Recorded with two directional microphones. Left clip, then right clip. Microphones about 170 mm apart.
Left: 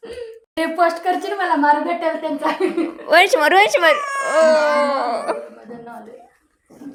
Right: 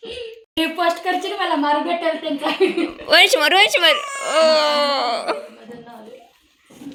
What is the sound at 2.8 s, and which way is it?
A child's voice, 15° left (ahead or behind).